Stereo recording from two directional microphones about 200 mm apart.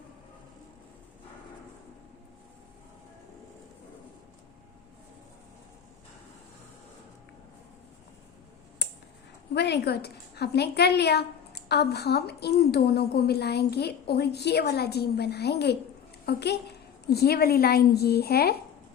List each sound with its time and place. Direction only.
9.6 s a woman's voice: 55° left (ahead or behind)